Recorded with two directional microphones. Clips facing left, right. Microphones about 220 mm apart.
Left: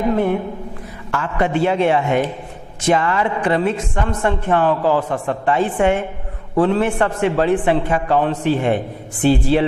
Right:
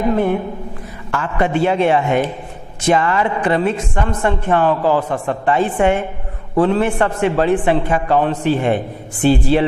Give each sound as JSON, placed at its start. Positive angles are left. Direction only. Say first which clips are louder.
{"t": 0.0, "sound": "a man's voice", "louder": "right 1 dB", "side_deg": -15}